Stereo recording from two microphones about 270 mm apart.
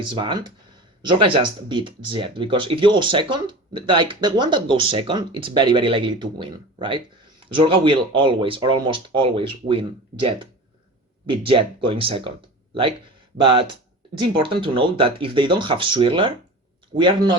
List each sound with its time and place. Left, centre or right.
0.0 s speech: centre
13.4 s speech: centre